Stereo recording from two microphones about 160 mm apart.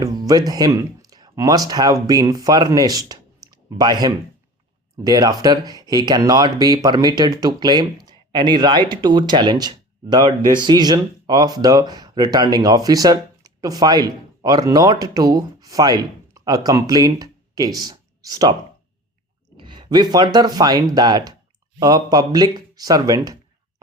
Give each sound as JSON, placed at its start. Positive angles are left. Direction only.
{"t": 0.0, "sound": "speech", "side_deg": -25}
{"t": 19.5, "sound": "speech", "side_deg": -30}